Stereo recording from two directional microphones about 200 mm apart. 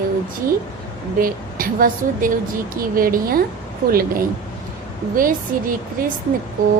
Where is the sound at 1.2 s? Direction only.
45° right (ahead or behind).